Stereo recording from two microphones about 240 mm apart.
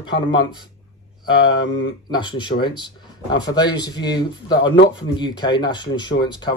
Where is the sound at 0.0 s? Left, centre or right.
Centre.